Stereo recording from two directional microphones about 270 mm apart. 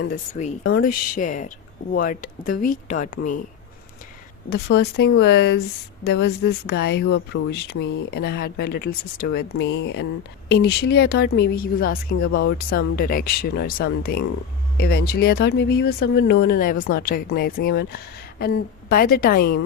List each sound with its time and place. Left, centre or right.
0.1 s speech: left
4.4 s speech: left